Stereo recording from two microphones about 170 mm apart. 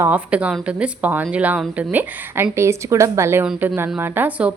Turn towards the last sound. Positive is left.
turn(degrees=-10)  # may be behind; listen again after turning